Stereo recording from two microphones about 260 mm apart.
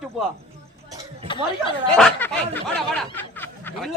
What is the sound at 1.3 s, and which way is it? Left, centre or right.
Speech, centre.